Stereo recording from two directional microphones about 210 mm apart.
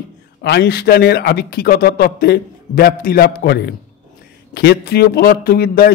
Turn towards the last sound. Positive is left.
turn(degrees=45)  # may be behind; listen again after turning